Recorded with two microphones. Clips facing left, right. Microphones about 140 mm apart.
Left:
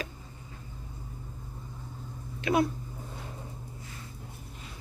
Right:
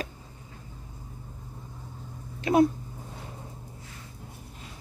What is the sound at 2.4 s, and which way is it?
Speech, 40° right (ahead or behind).